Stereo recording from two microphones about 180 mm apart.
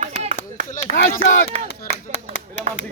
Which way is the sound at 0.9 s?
60° left (ahead or behind).